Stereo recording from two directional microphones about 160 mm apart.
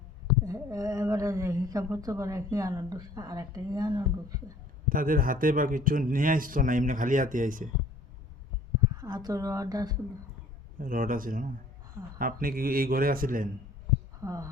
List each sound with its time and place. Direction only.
0.4 s speech: 20° right (ahead or behind)
4.9 s a man's voice: 60° right (ahead or behind)
9.0 s a woman's voice: 25° right (ahead or behind)
10.8 s a man's voice: 55° right (ahead or behind)
14.2 s speech: 20° right (ahead or behind)